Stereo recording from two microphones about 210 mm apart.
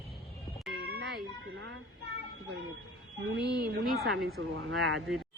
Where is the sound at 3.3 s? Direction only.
50° right (ahead or behind).